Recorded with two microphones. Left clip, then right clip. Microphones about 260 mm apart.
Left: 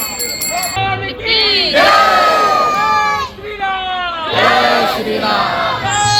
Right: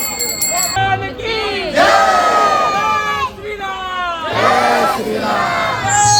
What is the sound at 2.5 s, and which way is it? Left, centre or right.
Crowd, left.